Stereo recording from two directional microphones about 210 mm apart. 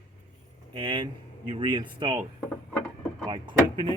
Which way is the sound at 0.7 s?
25° right (ahead or behind).